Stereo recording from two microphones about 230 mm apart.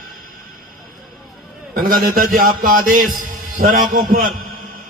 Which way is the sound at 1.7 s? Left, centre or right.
Right.